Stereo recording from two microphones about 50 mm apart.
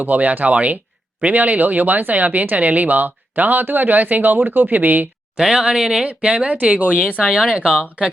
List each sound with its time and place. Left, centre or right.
0.0 s speech: right
5.4 s speech: centre
6.1 s speech: right